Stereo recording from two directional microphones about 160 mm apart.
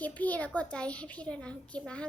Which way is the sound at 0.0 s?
10° left (ahead or behind).